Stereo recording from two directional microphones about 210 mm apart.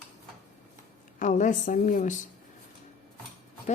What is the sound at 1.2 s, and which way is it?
Speech, 35° left (ahead or behind).